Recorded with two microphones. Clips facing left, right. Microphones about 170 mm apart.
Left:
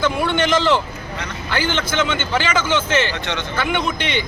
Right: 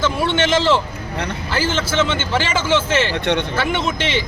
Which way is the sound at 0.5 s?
30° right (ahead or behind).